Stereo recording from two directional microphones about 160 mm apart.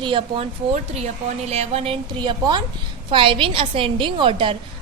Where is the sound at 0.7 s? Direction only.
45° right (ahead or behind).